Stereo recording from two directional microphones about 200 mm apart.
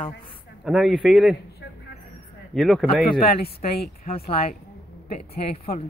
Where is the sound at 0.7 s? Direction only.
Centre (ahead or behind).